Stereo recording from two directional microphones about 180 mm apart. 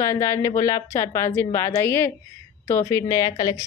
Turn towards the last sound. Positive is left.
turn(degrees=20)  # may be behind; listen again after turning